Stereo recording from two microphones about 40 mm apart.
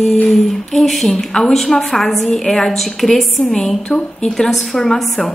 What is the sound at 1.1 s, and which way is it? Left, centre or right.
Speech, centre.